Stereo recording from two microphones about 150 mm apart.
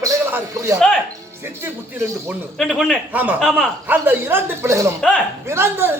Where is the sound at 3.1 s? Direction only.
10° right (ahead or behind).